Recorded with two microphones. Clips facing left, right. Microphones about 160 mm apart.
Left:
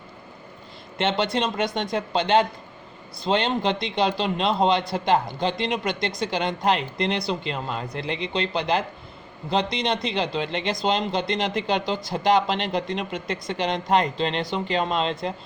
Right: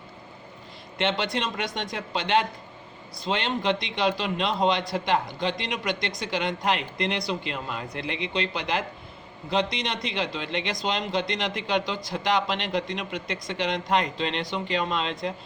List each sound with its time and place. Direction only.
0.9 s speech: 35° left (ahead or behind)